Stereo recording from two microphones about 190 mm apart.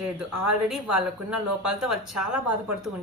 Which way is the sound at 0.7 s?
Centre (ahead or behind).